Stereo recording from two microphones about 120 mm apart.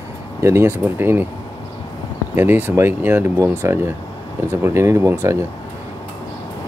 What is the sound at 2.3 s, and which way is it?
Speech, 15° right (ahead or behind).